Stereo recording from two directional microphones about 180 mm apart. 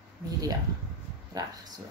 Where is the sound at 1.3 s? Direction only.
20° right (ahead or behind).